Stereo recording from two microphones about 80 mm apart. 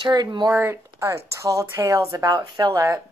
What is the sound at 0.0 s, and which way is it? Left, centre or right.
Speech, right.